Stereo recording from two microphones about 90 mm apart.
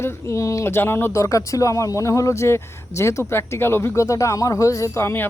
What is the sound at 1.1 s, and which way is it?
Speech, 35° left (ahead or behind).